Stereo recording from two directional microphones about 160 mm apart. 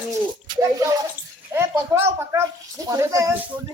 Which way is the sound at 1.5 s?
15° right (ahead or behind).